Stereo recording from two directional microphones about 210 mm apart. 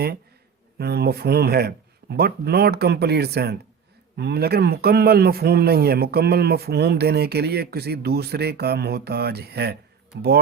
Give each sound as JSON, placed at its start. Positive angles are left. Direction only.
{"t": 0.8, "sound": "a man's voice", "side_deg": -50}